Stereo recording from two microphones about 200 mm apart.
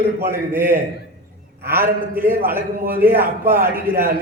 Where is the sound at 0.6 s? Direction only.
40° right (ahead or behind).